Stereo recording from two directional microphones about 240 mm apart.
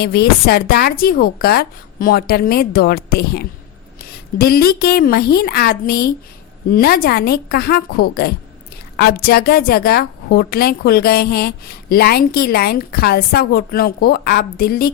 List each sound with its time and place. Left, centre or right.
0.0 s a woman's voice: left